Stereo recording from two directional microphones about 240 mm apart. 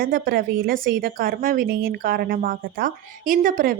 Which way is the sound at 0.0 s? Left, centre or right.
Right.